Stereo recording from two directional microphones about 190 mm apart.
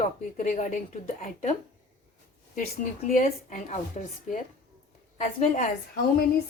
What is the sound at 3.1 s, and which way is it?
Speech, 40° left (ahead or behind).